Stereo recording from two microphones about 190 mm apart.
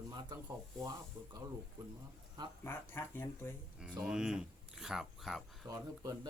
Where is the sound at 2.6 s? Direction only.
10° left (ahead or behind).